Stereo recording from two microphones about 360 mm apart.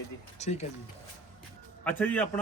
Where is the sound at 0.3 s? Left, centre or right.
Centre.